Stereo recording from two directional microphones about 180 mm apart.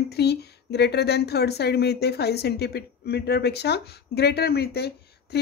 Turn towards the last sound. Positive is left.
turn(degrees=65)  # may be behind; listen again after turning